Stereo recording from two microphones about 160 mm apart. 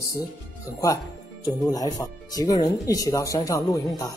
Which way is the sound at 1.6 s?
25° left (ahead or behind).